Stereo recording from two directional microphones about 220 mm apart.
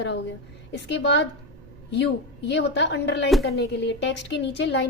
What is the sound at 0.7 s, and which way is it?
Speech, 50° left (ahead or behind).